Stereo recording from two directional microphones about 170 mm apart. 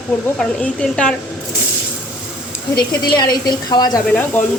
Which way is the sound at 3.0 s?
25° left (ahead or behind).